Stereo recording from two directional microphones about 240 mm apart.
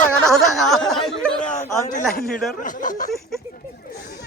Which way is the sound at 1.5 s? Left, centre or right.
Left.